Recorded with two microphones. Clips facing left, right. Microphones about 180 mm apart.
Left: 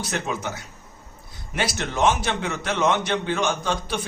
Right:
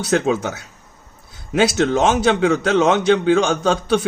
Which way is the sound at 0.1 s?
90° right.